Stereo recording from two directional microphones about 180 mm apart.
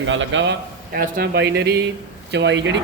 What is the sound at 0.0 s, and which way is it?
Speech, 90° right.